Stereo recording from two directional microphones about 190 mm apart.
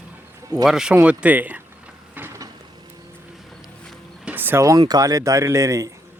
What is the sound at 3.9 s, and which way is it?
Speech, 5° right (ahead or behind).